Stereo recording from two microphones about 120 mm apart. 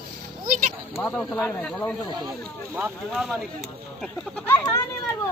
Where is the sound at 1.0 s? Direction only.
15° left (ahead or behind).